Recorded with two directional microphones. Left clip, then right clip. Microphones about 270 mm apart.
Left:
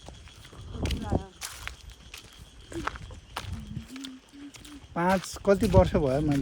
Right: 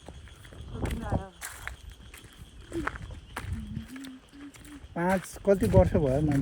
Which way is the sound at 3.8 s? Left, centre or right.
Centre.